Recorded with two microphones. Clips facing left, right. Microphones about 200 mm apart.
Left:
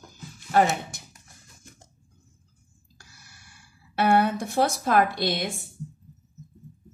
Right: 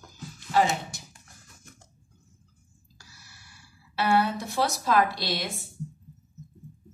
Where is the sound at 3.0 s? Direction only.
55° left (ahead or behind).